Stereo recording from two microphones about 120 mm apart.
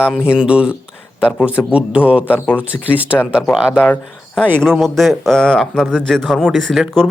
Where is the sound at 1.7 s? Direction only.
10° right (ahead or behind).